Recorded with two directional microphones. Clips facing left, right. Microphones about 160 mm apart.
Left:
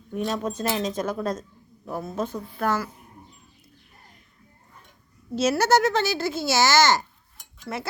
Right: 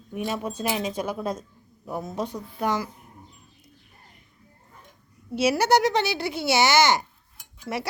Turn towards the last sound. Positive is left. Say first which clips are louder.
# right 2 dB
turn(degrees=-15)  # may be behind; listen again after turning